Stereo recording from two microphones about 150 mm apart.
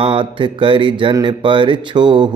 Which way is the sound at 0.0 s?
35° right (ahead or behind).